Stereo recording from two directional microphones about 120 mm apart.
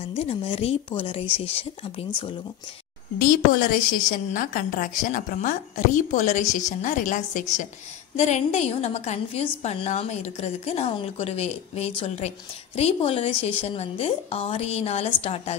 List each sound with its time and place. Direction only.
0.1 s a woman's voice: 55° left (ahead or behind)
3.7 s a woman's voice: 90° left
8.2 s a woman's voice: 65° left (ahead or behind)